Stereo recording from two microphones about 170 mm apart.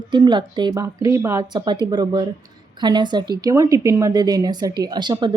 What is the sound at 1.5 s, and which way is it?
A woman's voice, 25° right (ahead or behind).